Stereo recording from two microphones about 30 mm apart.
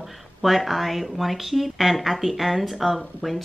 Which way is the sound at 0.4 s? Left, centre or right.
Centre.